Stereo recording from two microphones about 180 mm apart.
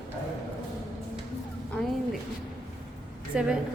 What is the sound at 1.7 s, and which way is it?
Speech, centre (ahead or behind).